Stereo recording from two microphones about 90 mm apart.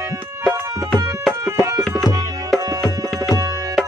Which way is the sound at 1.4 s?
30° right (ahead or behind).